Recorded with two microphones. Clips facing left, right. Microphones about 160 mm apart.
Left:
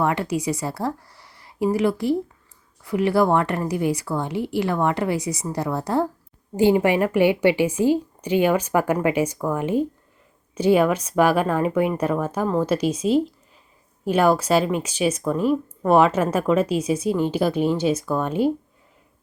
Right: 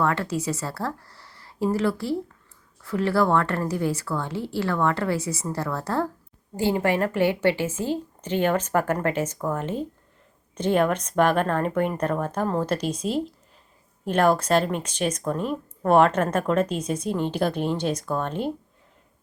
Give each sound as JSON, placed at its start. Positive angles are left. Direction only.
{"t": 0.0, "sound": "a woman's voice", "side_deg": 15}